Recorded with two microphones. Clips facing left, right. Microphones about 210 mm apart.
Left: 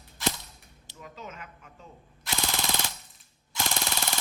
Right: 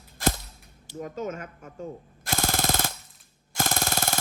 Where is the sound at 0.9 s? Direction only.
45° right (ahead or behind).